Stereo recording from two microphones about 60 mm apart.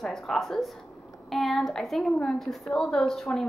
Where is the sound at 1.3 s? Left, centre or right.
Centre.